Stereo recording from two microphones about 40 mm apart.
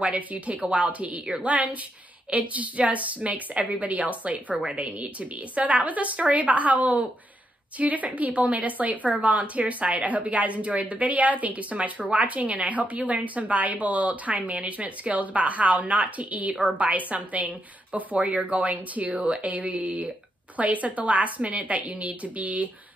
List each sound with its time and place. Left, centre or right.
0.0 s a woman's voice: right